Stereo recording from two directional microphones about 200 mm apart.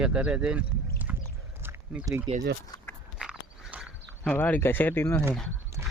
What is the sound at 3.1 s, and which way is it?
Walk, 5° right (ahead or behind).